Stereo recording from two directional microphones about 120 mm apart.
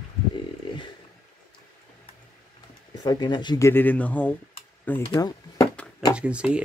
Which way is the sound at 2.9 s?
35° left (ahead or behind).